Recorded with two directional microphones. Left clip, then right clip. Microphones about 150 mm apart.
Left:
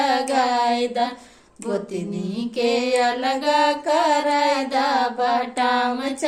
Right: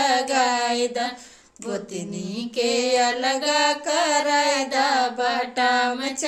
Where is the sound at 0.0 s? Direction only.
10° left (ahead or behind).